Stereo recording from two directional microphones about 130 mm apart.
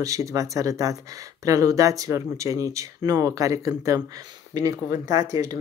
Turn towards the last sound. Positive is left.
turn(degrees=-25)  # may be behind; listen again after turning